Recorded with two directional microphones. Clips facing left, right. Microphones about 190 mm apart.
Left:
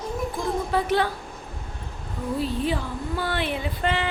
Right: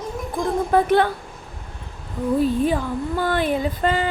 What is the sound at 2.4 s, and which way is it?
Speech, 45° right (ahead or behind).